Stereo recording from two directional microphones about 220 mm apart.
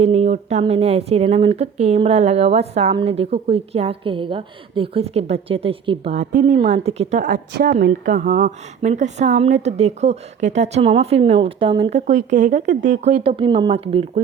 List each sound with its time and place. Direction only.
0.0 s a woman's voice: 30° right (ahead or behind)
7.3 s a woman's voice: 45° right (ahead or behind)
7.9 s a woman's voice: 35° right (ahead or behind)